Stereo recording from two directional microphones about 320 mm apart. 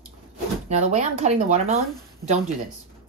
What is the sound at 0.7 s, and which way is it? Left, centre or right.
Speech, right.